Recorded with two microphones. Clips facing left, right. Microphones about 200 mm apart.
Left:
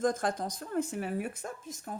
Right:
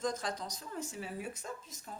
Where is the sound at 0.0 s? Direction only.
50° left (ahead or behind).